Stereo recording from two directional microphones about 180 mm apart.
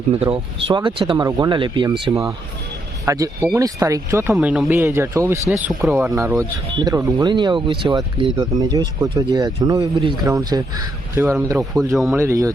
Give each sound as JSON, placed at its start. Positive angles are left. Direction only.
{"t": 0.2, "sound": "speech", "side_deg": -25}
{"t": 4.4, "sound": "speech", "side_deg": -5}